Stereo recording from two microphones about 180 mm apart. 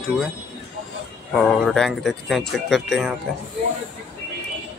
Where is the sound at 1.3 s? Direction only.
Centre (ahead or behind).